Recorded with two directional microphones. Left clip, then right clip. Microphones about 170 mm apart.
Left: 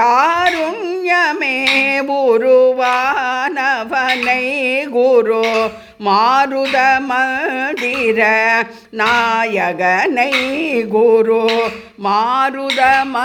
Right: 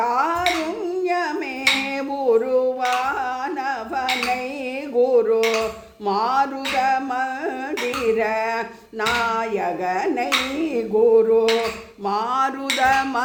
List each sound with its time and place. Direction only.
0.0 s carnatic music: 30° left (ahead or behind)
1.0 s singing: 30° left (ahead or behind)
1.9 s carnatic music: 30° left (ahead or behind)
4.6 s a sound: 30° left (ahead or behind); by 13.2 s 15° left (ahead or behind)